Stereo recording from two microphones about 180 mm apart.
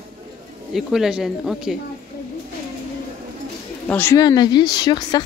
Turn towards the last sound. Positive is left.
turn(degrees=25)  # may be behind; listen again after turning